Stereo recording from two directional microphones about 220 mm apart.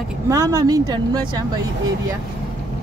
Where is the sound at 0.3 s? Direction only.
15° right (ahead or behind).